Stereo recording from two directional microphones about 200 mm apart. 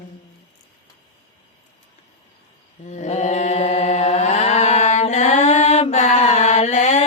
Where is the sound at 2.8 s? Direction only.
35° left (ahead or behind).